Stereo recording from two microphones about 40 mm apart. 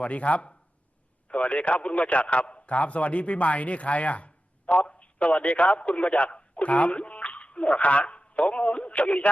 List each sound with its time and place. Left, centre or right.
0.0 s a man's voice: left